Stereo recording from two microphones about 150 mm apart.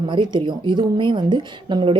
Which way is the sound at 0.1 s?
30° right (ahead or behind).